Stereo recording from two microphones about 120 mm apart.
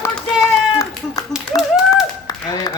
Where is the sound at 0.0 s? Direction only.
30° left (ahead or behind).